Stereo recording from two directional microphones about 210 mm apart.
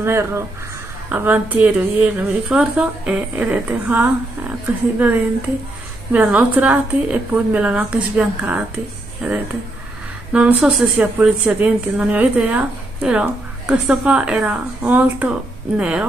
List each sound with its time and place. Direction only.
0.0 s a woman's voice: 10° right (ahead or behind)
6.1 s a woman's voice: 10° right (ahead or behind)